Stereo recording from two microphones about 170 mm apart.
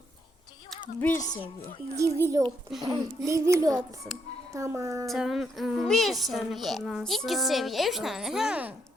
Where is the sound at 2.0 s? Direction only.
20° right (ahead or behind).